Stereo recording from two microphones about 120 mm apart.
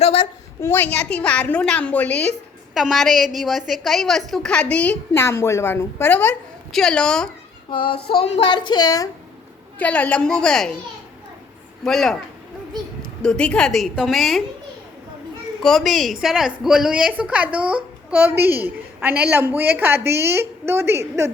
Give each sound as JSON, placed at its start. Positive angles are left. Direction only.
{"t": 0.0, "sound": "a sound", "side_deg": 50}
{"t": 0.6, "sound": "a woman's voice", "side_deg": 20}
{"t": 2.7, "sound": "a woman's voice", "side_deg": 0}
{"t": 6.7, "sound": "a woman's voice", "side_deg": 5}
{"t": 7.7, "sound": "child singing", "side_deg": 45}
{"t": 9.7, "sound": "a woman's voice", "side_deg": 10}
{"t": 11.8, "sound": "a woman's voice", "side_deg": 5}
{"t": 15.6, "sound": "a woman's voice", "side_deg": 0}